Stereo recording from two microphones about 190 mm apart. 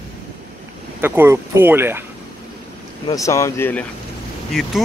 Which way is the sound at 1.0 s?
10° right (ahead or behind).